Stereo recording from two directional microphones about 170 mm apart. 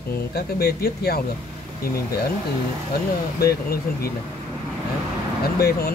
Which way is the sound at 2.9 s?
65° left (ahead or behind).